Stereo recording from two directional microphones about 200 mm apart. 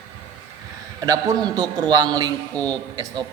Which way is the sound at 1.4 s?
20° right (ahead or behind).